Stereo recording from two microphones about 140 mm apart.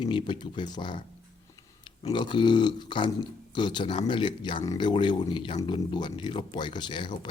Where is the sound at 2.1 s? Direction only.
35° left (ahead or behind).